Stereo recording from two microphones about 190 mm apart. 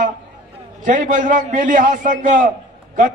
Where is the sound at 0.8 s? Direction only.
45° right (ahead or behind).